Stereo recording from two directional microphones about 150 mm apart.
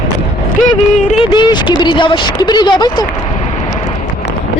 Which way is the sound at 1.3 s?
30° left (ahead or behind).